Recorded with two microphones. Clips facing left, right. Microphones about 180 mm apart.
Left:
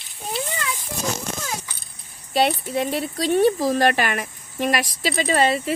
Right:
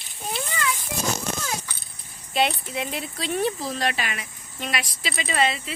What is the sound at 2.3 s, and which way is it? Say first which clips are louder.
Speech: left 4 dB; 40° left (ahead or behind).